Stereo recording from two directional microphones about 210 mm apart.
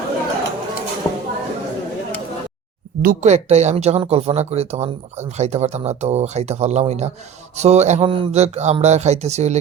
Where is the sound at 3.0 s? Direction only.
35° right (ahead or behind).